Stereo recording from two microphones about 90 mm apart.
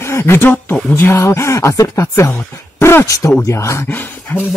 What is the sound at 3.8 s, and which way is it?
Speech, 20° left (ahead or behind).